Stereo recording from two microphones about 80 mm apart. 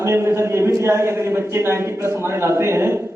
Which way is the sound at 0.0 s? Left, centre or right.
Right.